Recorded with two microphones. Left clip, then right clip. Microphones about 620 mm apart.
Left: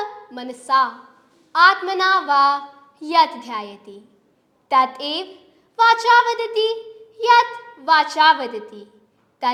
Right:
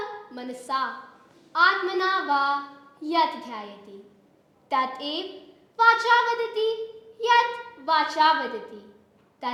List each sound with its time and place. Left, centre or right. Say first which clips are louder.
0.3 s a woman's voice: left 11 dB; left
7.2 s child singing: left 6 dB; left
7.9 s a woman's voice: left 6 dB; left